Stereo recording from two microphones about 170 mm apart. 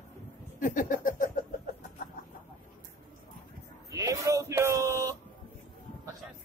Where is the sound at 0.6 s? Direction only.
50° left (ahead or behind).